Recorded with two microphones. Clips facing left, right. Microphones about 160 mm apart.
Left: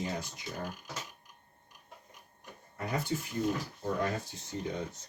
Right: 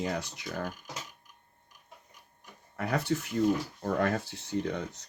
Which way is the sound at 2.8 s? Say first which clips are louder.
Right 4 dB; 75° right (ahead or behind).